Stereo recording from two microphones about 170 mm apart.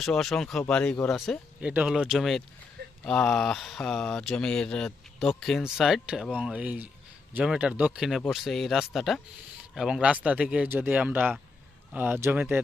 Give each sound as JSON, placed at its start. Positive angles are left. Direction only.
{"t": 0.0, "sound": "speech", "side_deg": 0}